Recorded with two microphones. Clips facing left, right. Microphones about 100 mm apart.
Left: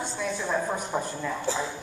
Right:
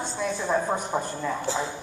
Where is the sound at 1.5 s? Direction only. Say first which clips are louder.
Left 2 dB; 15° right (ahead or behind).